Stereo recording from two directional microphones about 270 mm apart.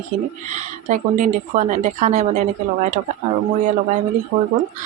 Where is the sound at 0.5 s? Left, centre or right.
Right.